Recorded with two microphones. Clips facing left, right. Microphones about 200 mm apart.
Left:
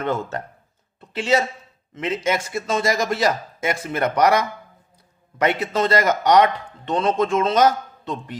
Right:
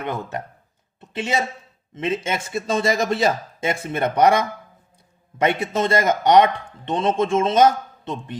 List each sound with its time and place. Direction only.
0.0 s speech: 15° right (ahead or behind)
5.7 s speech: 25° right (ahead or behind)